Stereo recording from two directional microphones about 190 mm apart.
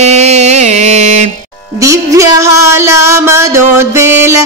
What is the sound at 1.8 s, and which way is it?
Music, 15° right (ahead or behind).